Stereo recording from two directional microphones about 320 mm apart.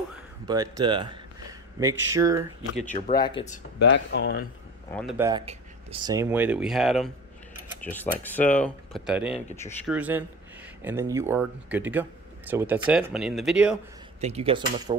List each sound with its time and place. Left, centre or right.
0.5 s speech: centre
3.1 s speech: centre
3.8 s speech: left
4.9 s speech: centre
5.4 s speech: centre
14.2 s speech: centre